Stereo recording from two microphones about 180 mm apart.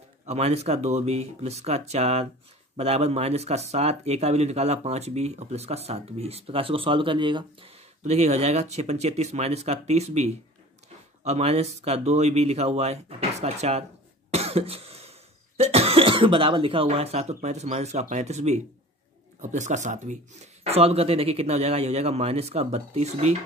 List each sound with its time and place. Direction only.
0.3 s speech: 35° right (ahead or behind)
8.0 s speech: 40° right (ahead or behind)
14.3 s cough: 35° right (ahead or behind)
19.4 s speech: 40° right (ahead or behind)